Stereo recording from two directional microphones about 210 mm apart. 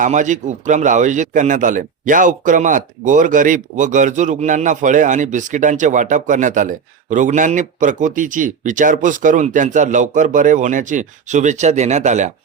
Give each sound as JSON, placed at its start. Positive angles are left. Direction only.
{"t": 0.0, "sound": "a man's voice", "side_deg": -35}